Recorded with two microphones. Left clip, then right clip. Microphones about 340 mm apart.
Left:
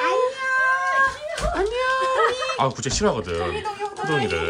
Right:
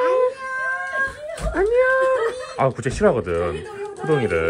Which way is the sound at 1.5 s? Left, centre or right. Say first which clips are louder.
Right 6 dB; centre.